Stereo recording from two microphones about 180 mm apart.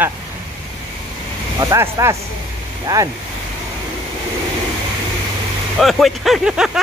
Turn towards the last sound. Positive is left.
turn(degrees=-5)  # may be behind; listen again after turning